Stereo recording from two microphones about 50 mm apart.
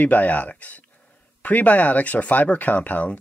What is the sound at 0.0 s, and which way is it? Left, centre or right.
Speech, left.